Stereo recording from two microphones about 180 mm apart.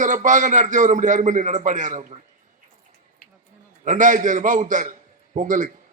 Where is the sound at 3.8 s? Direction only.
45° right (ahead or behind).